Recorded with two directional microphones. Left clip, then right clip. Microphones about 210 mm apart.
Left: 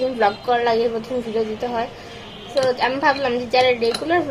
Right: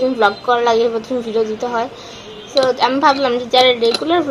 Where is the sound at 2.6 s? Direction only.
15° right (ahead or behind).